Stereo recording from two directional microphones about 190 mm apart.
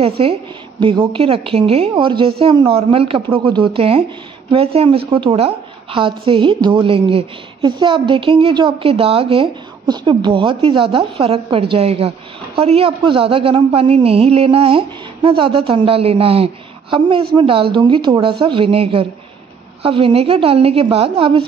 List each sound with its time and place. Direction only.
0.0 s a woman's voice: 30° right (ahead or behind)